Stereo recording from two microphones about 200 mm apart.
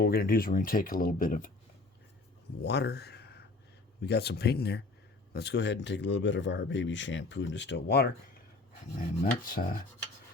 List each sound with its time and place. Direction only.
0.0 s speech: 50° left (ahead or behind)
2.6 s speech: 55° left (ahead or behind)
9.2 s speech: 45° left (ahead or behind)